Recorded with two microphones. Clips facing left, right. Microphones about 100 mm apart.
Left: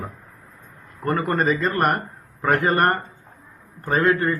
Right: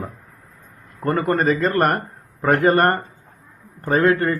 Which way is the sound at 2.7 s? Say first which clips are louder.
Right 2 dB; 35° right (ahead or behind).